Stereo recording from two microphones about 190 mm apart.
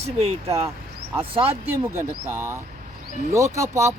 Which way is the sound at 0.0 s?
35° right (ahead or behind).